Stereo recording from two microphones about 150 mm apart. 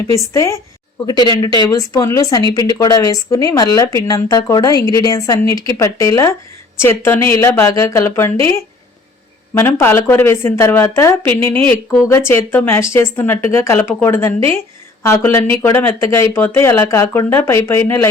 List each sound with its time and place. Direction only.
0.3 s speech: 20° left (ahead or behind)